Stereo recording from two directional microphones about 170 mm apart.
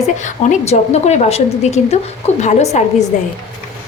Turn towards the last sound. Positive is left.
turn(degrees=40)  # may be behind; listen again after turning